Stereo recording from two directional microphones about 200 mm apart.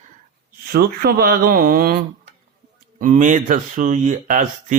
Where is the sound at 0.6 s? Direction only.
50° right (ahead or behind).